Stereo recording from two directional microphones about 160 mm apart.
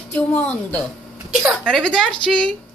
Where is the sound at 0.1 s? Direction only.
10° left (ahead or behind).